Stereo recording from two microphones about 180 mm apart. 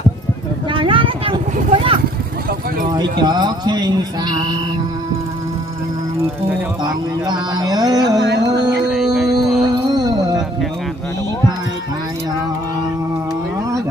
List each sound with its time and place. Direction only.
0.7 s vehicle: 30° right (ahead or behind)
2.9 s speech: 25° right (ahead or behind)
6.8 s speech: 20° right (ahead or behind)
8.9 s a sound: 5° right (ahead or behind)
9.9 s music: 20° right (ahead or behind)